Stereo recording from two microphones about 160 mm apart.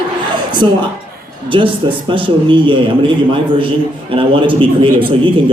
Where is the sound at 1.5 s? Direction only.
30° right (ahead or behind).